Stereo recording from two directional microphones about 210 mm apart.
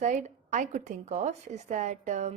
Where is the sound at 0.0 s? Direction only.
35° right (ahead or behind).